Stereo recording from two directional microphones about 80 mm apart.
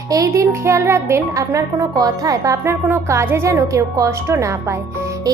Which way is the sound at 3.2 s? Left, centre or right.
Right.